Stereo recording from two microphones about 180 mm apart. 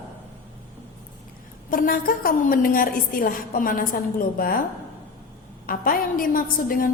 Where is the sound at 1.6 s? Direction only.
50° left (ahead or behind).